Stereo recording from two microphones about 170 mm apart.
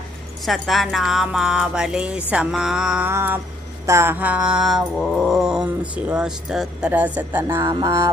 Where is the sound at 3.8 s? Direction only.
15° right (ahead or behind).